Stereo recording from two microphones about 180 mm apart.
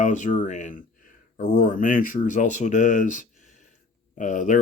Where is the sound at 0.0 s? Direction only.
45° left (ahead or behind).